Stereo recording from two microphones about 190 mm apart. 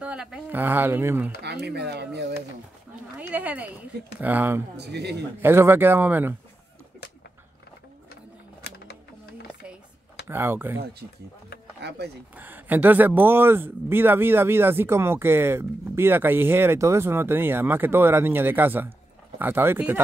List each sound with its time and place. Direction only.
0.0 s speech: 5° right (ahead or behind)
1.4 s speech: 60° right (ahead or behind)
3.2 s speech: 10° right (ahead or behind)
4.7 s speech: 60° right (ahead or behind)
5.4 s speech: 10° right (ahead or behind)
8.6 s a sound: 60° left (ahead or behind)
10.2 s speech: 10° right (ahead or behind)
11.8 s speech: 65° right (ahead or behind)
12.4 s speech: 10° right (ahead or behind)